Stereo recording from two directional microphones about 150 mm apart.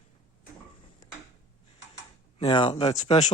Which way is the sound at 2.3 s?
40° left (ahead or behind).